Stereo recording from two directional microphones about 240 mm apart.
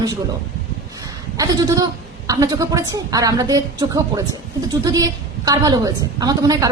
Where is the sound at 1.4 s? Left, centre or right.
Centre.